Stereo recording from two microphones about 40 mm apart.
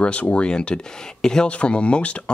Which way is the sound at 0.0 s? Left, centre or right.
Left.